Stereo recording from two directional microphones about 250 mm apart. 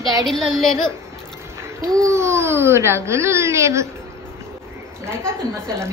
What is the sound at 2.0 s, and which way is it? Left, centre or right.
Speech, centre.